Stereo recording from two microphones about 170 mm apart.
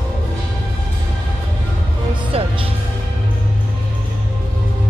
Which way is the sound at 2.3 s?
35° right (ahead or behind).